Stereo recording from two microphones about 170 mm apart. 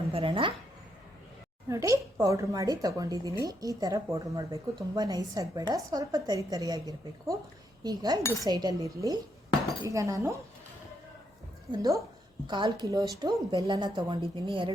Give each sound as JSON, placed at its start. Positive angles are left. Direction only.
{"t": 0.1, "sound": "speech", "side_deg": -35}
{"t": 1.7, "sound": "a woman's voice", "side_deg": -15}
{"t": 11.7, "sound": "a woman's voice", "side_deg": -20}